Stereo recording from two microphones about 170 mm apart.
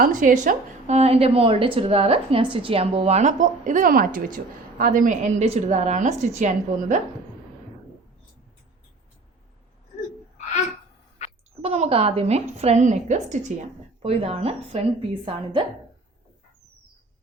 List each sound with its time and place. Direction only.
0.0 s a woman's voice: 50° right (ahead or behind)
10.3 s a sound: 45° left (ahead or behind)
11.6 s a woman's voice: 40° right (ahead or behind)